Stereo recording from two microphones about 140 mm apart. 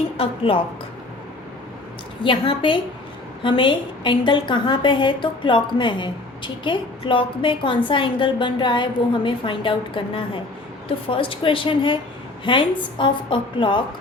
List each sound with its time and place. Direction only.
0.2 s a woman's voice: 40° left (ahead or behind)
2.2 s a woman's voice: 40° left (ahead or behind)